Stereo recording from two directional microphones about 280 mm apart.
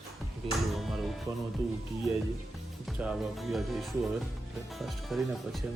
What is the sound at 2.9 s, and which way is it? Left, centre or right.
Speech, centre.